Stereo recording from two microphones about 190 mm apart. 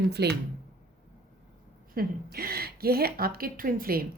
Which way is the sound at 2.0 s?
50° right (ahead or behind).